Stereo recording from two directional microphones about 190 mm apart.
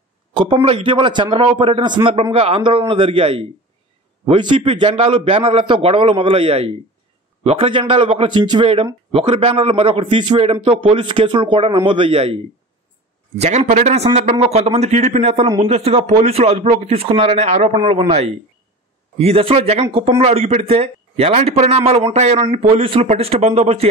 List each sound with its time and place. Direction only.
0.3 s a man's voice: 25° right (ahead or behind)
13.4 s speech: 35° right (ahead or behind)